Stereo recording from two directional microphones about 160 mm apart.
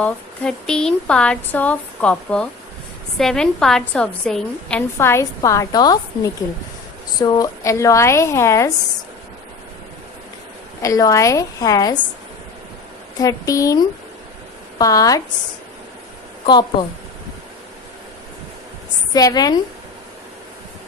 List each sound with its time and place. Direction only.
0.0 s a woman's voice: 5° left (ahead or behind)
4.9 s a woman's voice: 15° left (ahead or behind)
10.8 s a woman's voice: 20° left (ahead or behind)
13.1 s a woman's voice: 20° left (ahead or behind)
19.1 s a woman's voice: 25° left (ahead or behind)